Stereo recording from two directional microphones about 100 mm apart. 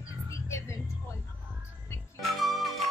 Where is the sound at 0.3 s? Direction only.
25° left (ahead or behind).